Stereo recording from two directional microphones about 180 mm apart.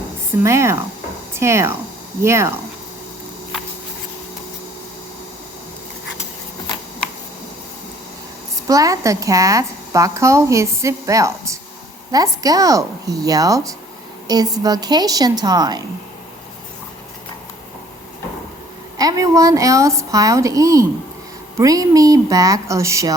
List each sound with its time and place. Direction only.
0.4 s a woman's voice: 15° right (ahead or behind)
8.6 s a woman's voice: 20° right (ahead or behind)
18.9 s a woman's voice: 20° right (ahead or behind)